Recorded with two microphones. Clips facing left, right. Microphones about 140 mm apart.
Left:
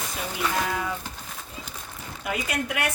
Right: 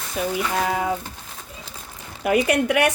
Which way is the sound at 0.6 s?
65° right (ahead or behind).